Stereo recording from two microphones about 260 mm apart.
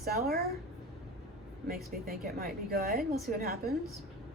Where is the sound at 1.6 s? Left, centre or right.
Right.